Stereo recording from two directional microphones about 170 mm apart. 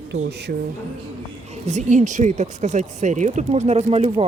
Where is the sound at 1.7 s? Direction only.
45° right (ahead or behind).